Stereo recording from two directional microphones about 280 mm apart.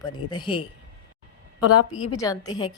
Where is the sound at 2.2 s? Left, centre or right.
Centre.